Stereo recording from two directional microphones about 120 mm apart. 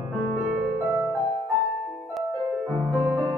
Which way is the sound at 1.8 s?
Centre (ahead or behind).